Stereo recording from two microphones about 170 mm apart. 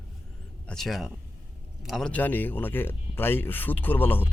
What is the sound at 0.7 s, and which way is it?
Speech, centre (ahead or behind).